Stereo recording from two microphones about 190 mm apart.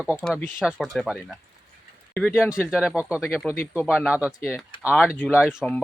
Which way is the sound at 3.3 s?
10° left (ahead or behind).